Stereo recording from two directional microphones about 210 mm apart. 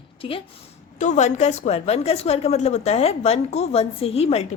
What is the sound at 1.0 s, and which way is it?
A woman's voice, 35° left (ahead or behind).